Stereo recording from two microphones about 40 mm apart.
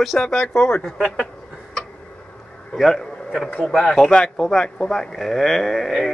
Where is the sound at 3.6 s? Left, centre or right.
Centre.